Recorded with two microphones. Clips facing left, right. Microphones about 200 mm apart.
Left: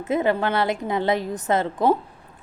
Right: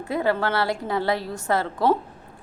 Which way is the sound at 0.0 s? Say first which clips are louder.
Left 2 dB; 20° left (ahead or behind).